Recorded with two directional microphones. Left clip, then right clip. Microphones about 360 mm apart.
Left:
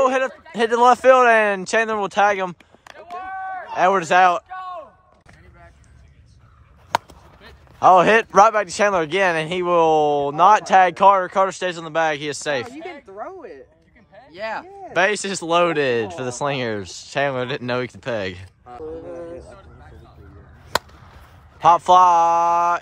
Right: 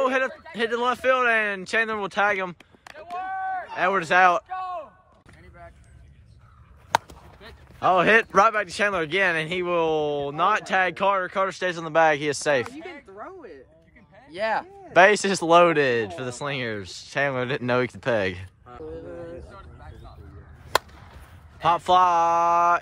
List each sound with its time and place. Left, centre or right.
0.0 s a man's voice: centre
6.9 s a sound: centre
7.8 s speech: centre
12.8 s a sound: centre
14.3 s speech: right
14.9 s speech: centre
18.7 s music: centre
20.7 s a sound: centre
21.5 s speech: centre